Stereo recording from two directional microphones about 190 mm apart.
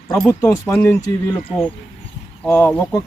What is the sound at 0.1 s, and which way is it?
Speech, 10° left (ahead or behind).